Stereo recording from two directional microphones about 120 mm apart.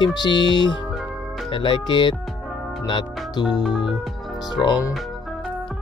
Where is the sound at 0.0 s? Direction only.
35° left (ahead or behind).